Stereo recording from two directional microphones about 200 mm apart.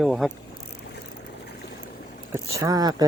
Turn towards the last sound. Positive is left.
turn(degrees=-20)  # may be behind; listen again after turning